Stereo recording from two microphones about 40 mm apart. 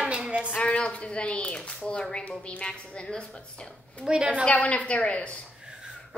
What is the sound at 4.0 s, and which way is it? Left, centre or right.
Speech, centre.